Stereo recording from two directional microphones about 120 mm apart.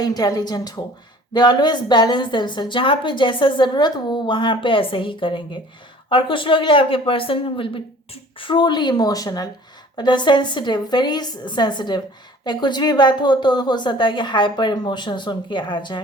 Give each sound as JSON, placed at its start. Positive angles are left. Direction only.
{"t": 0.0, "sound": "a woman's voice", "side_deg": 30}